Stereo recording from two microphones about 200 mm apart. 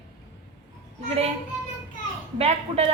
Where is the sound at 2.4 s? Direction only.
30° right (ahead or behind).